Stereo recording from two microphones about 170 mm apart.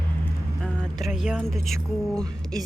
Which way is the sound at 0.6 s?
5° left (ahead or behind).